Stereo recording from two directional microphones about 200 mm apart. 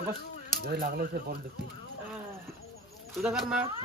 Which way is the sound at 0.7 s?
45° right (ahead or behind).